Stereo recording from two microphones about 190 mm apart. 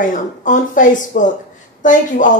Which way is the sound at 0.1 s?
45° left (ahead or behind).